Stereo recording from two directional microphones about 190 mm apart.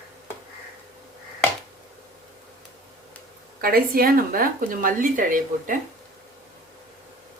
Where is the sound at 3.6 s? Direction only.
50° right (ahead or behind).